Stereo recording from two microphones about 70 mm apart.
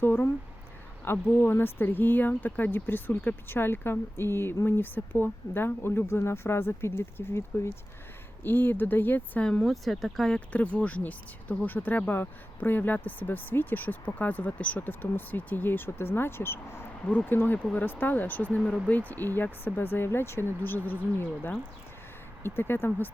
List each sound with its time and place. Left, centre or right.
0.0 s speech: left
9.4 s speech: centre
10.5 s speech: centre